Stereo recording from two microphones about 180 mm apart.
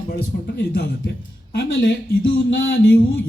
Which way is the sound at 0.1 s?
60° left (ahead or behind).